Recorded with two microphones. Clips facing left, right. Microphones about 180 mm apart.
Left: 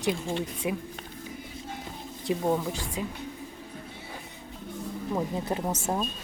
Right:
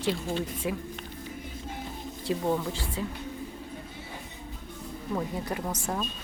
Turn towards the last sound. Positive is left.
turn(degrees=25)  # may be behind; listen again after turning